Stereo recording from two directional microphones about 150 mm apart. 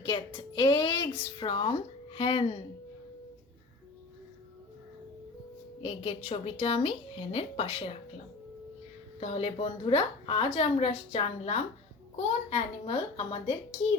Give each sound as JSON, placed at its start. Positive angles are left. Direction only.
{"t": 0.3, "sound": "music", "side_deg": 35}
{"t": 1.4, "sound": "speech", "side_deg": 35}
{"t": 5.8, "sound": "a woman's voice", "side_deg": 40}
{"t": 9.2, "sound": "a woman's voice", "side_deg": 40}